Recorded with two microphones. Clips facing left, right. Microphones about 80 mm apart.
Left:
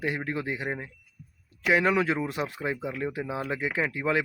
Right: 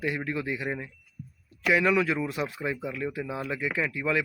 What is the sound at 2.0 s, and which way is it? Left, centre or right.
Speech, left.